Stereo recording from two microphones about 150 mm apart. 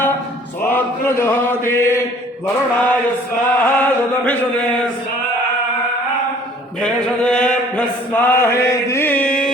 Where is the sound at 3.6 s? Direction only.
10° left (ahead or behind).